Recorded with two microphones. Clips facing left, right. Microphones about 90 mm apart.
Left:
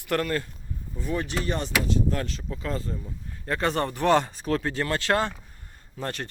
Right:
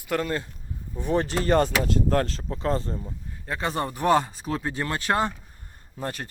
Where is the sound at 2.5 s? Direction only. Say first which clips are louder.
Right 5 dB; 35° right (ahead or behind).